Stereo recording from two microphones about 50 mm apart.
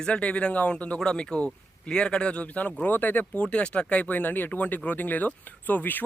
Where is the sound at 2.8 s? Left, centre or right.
Left.